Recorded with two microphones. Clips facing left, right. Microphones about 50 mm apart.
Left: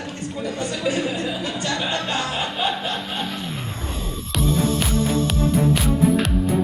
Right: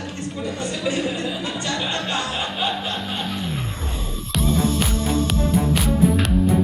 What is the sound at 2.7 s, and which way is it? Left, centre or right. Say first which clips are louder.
Snicker: even; centre.